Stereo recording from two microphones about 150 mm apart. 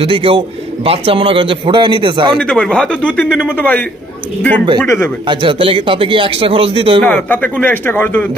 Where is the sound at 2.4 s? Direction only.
5° left (ahead or behind).